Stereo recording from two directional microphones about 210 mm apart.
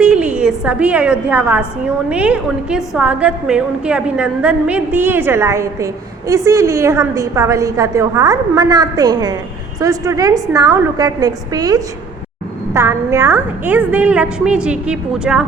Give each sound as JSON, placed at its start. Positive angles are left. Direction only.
{"t": 0.0, "sound": "a woman's voice", "side_deg": -5}